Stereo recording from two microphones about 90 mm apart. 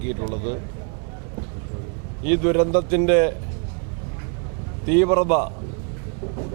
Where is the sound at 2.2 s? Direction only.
15° right (ahead or behind).